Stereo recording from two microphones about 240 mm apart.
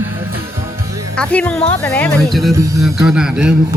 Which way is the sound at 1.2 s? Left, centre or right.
Centre.